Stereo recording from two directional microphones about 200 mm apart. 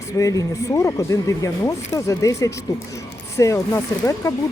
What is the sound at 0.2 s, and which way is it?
Speech, 15° left (ahead or behind).